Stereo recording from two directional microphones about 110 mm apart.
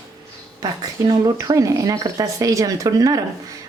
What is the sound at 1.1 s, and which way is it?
Speech, 40° right (ahead or behind).